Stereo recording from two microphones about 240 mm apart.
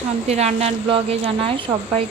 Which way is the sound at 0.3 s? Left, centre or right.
Right.